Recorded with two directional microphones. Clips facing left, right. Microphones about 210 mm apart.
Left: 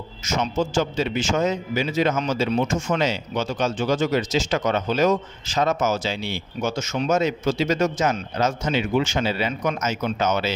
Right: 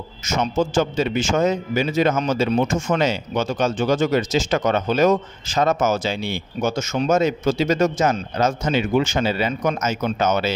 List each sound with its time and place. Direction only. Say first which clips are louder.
0.2 s a man's voice: right 3 dB; 50° right (ahead or behind)